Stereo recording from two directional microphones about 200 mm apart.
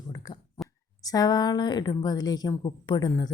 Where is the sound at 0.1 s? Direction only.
20° left (ahead or behind).